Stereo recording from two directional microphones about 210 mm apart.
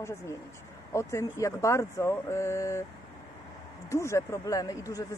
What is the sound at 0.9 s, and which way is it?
Speech, 15° left (ahead or behind).